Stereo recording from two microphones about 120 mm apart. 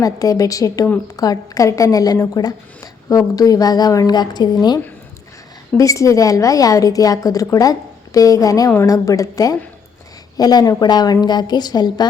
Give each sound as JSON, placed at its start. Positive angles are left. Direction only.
{"t": 0.0, "sound": "a woman's voice", "side_deg": 30}
{"t": 5.7, "sound": "a woman's voice", "side_deg": 25}